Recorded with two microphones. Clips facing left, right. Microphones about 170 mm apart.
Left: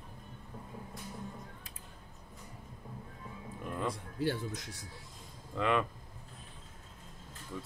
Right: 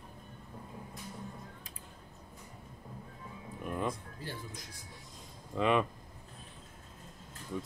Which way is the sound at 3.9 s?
75° left (ahead or behind).